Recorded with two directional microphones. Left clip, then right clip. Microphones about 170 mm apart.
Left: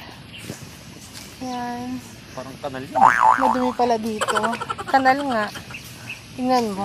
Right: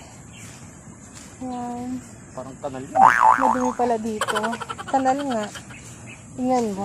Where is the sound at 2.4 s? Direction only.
20° left (ahead or behind).